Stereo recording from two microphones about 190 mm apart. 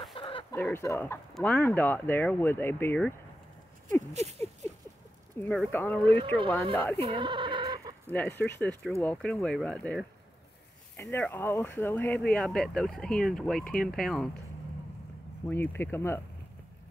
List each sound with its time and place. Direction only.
0.1 s chicken: 30° left (ahead or behind)
0.6 s speech: 10° left (ahead or behind)
4.1 s patter: 35° right (ahead or behind)
5.4 s speech: 5° left (ahead or behind)
6.0 s speech: 30° right (ahead or behind)
6.7 s speech: 10° left (ahead or behind)
7.0 s sheep: 25° right (ahead or behind)
8.1 s speech: 10° left (ahead or behind)
15.4 s speech: 10° left (ahead or behind)